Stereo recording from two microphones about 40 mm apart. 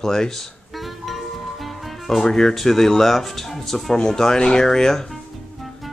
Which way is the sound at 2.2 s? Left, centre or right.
Centre.